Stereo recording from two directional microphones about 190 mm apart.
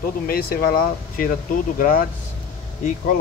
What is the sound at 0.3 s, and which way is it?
Speech, 50° left (ahead or behind).